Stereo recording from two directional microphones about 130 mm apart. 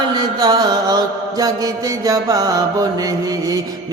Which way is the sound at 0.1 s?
30° right (ahead or behind).